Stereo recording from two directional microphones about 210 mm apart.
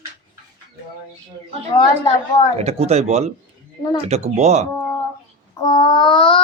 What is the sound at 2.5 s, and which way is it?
Speech, 30° right (ahead or behind).